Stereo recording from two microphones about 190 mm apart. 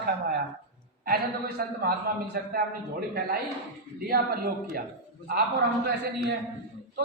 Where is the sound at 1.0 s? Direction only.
50° right (ahead or behind).